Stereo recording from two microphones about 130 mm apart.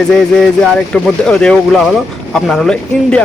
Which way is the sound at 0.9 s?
5° left (ahead or behind).